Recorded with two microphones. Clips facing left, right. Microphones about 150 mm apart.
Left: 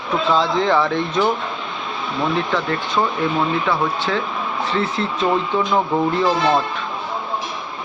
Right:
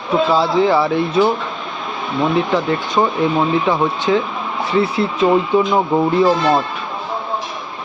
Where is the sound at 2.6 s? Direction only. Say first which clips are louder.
Right 4 dB; 15° right (ahead or behind).